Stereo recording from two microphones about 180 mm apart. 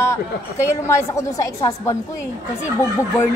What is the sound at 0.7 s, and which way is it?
Speech, 15° left (ahead or behind).